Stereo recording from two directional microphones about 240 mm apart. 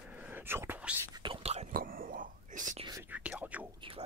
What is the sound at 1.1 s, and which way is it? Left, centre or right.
Whispering, right.